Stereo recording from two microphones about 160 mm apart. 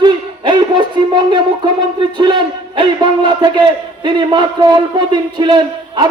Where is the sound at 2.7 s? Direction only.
30° right (ahead or behind).